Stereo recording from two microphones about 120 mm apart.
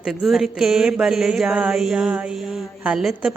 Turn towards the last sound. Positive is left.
turn(degrees=-5)  # may be behind; listen again after turning